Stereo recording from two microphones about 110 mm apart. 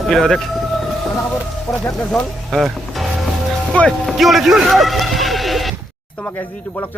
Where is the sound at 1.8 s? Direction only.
5° left (ahead or behind).